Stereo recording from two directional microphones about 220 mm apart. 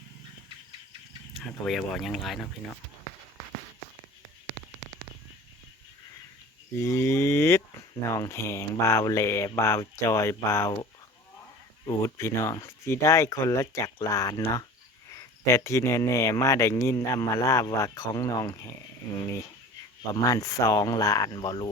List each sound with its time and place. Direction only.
1.3 s speech: centre (ahead or behind)
6.7 s speech: 10° left (ahead or behind)
11.9 s speech: 10° left (ahead or behind)